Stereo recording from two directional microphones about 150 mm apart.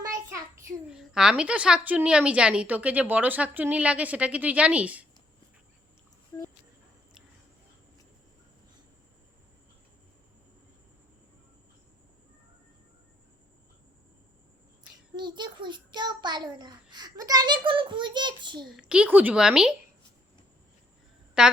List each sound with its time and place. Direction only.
0.0 s child singing: 20° right (ahead or behind)
0.9 s a woman's voice: 5° right (ahead or behind)
15.1 s a child's voice: 30° right (ahead or behind)
18.6 s a woman's voice: 5° right (ahead or behind)
21.4 s a woman's voice: 5° right (ahead or behind)